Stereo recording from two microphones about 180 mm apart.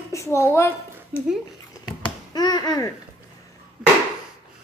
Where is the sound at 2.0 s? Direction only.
20° left (ahead or behind).